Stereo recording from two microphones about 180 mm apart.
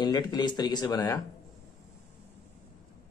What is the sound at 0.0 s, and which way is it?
Speech, 25° left (ahead or behind).